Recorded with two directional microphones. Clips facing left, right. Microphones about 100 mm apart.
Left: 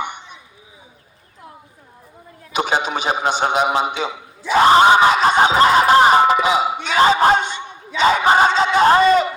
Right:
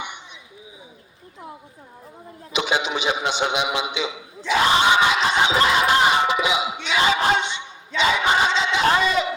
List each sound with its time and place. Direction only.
0.0 s a sound: 45° left (ahead or behind)
2.5 s a man's voice: 45° left (ahead or behind)
4.4 s music: 40° left (ahead or behind)
6.8 s a man's voice: 40° left (ahead or behind)